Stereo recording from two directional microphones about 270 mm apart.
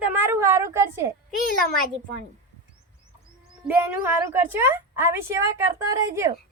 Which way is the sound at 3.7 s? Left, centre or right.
Centre.